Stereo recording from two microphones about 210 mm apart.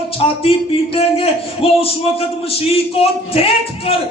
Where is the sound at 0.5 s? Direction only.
25° left (ahead or behind).